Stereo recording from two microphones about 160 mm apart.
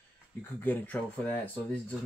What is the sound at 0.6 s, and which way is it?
Speech, 10° left (ahead or behind).